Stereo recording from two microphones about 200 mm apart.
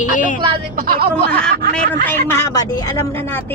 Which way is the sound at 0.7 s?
45° right (ahead or behind).